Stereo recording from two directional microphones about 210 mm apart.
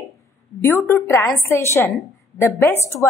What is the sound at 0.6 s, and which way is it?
A woman's voice, 10° left (ahead or behind).